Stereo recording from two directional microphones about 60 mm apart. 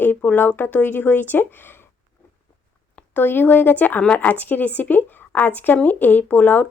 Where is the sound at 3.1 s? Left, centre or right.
Left.